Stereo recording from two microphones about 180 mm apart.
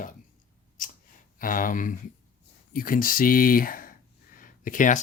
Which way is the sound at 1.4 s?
50° left (ahead or behind).